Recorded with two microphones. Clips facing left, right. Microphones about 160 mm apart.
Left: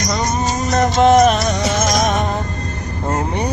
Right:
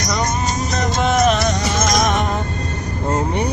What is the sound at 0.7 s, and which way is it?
Music, 45° left (ahead or behind).